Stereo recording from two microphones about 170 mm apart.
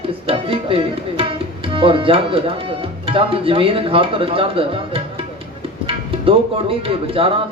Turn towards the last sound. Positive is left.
turn(degrees=-35)  # may be behind; listen again after turning